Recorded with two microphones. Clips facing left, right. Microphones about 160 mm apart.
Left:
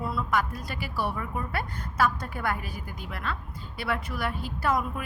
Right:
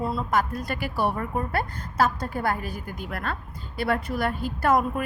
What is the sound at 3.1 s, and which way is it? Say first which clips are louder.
Speech: right 2 dB; 50° right (ahead or behind).